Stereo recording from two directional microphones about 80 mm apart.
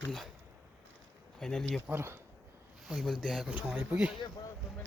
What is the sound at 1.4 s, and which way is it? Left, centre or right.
Speech, centre.